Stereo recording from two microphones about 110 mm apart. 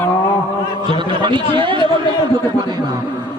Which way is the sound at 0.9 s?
50° right (ahead or behind).